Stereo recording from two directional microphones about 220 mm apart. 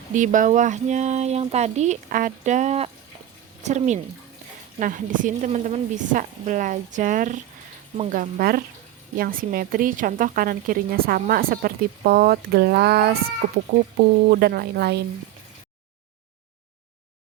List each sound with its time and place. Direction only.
0.1 s a woman's voice: 35° right (ahead or behind)
13.7 s a woman's voice: 35° right (ahead or behind)
14.3 s speech: 45° right (ahead or behind)